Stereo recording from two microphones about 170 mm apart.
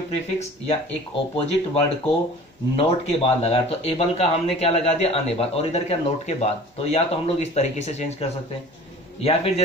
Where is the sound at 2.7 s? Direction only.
35° left (ahead or behind).